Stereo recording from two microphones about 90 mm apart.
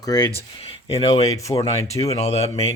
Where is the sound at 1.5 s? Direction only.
45° left (ahead or behind).